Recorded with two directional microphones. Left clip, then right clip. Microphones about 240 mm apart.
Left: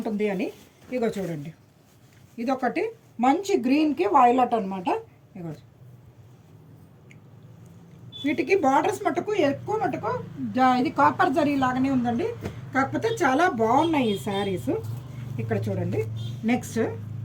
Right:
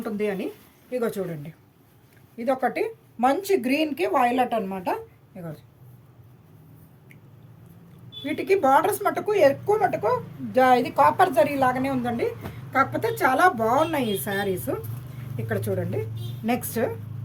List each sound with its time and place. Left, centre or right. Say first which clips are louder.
0.0 s speech: left 1 dB; right
2.4 s speech: right 2 dB; centre
3.2 s speech: right 1 dB; right
8.2 s speech: even; right
15.4 s speech: right 2 dB; right